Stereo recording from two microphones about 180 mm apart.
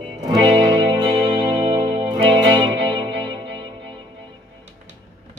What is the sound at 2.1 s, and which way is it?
Music, 25° right (ahead or behind).